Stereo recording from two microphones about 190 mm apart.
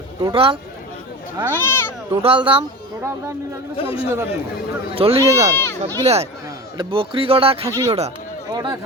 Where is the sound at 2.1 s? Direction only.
30° right (ahead or behind).